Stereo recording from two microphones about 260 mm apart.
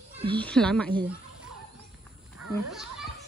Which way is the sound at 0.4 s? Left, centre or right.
Centre.